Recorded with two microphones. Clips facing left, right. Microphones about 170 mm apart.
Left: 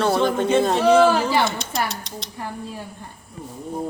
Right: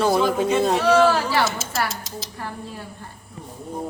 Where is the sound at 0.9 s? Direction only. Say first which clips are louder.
Left 3 dB; 15° left (ahead or behind).